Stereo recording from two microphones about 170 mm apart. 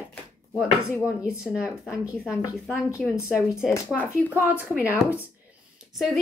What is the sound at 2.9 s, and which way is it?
Speech, 15° left (ahead or behind).